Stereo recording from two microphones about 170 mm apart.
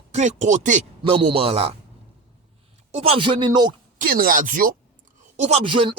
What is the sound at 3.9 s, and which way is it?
Speech, 55° right (ahead or behind).